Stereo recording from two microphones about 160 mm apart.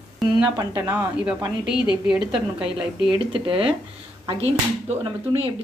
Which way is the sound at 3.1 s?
30° right (ahead or behind).